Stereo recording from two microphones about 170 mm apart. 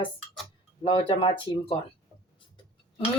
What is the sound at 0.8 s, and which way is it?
Speech, 30° left (ahead or behind).